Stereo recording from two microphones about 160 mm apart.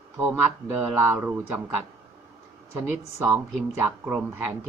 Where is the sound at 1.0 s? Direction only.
15° right (ahead or behind).